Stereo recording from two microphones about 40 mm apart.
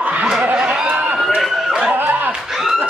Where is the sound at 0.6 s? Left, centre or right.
Right.